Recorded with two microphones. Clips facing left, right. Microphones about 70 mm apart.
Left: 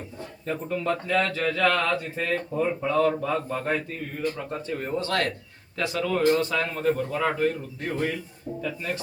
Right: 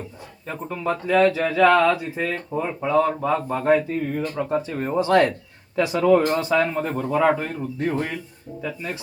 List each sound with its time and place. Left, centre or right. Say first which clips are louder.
0.4 s speech: right 1 dB; centre
7.9 s speech: right 2 dB; right
8.6 s speech: right 1 dB; centre